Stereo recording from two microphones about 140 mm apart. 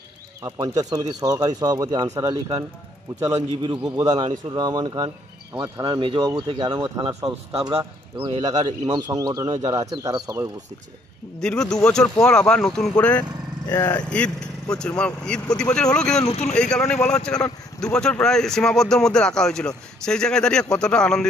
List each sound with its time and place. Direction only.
0.4 s speech: 25° right (ahead or behind)
3.3 s speech: 40° right (ahead or behind)
11.3 s speech: 5° left (ahead or behind)
13.7 s speech: 20° left (ahead or behind)
14.8 s speech: 10° left (ahead or behind)
16.3 s speech: 55° left (ahead or behind)
16.5 s speech: 5° left (ahead or behind)